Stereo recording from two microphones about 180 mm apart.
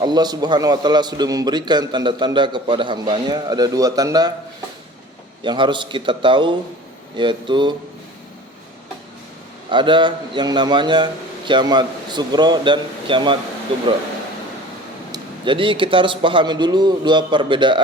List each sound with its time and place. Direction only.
0.0 s a man's voice: 25° right (ahead or behind)
5.4 s a man's voice: 25° right (ahead or behind)
9.6 s a man's voice: 25° right (ahead or behind)
15.1 s a man's voice: 25° right (ahead or behind)